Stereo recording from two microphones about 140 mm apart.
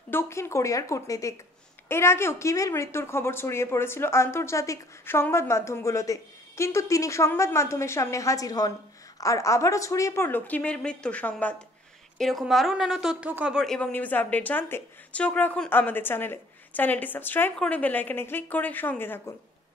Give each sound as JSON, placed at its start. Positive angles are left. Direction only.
{"t": 0.1, "sound": "a woman's voice", "side_deg": 20}
{"t": 13.7, "sound": "a woman's voice", "side_deg": 10}